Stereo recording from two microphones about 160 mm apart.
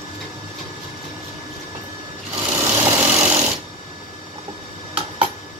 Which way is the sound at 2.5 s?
15° right (ahead or behind).